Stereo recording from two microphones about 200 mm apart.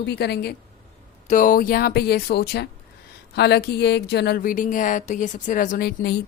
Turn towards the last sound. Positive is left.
turn(degrees=50)  # may be behind; listen again after turning